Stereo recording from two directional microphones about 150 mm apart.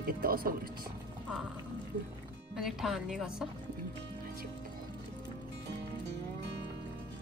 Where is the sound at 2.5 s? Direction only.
5° right (ahead or behind).